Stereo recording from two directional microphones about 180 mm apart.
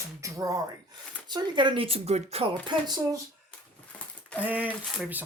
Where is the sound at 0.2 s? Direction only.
20° right (ahead or behind).